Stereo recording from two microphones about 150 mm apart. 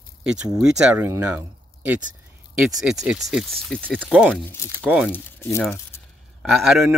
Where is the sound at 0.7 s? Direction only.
5° right (ahead or behind).